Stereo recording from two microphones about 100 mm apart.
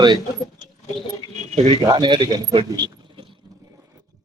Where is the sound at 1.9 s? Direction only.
50° right (ahead or behind).